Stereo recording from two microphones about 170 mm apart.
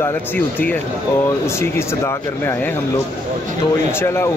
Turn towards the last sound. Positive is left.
turn(degrees=15)  # may be behind; listen again after turning